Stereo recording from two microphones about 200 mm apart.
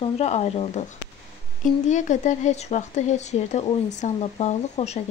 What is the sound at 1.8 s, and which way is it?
Speech, 40° left (ahead or behind).